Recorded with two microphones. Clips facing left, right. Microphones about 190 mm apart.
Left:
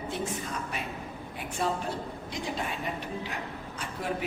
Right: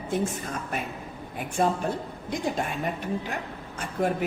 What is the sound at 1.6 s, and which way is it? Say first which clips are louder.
Speech: right 6 dB; 50° right (ahead or behind).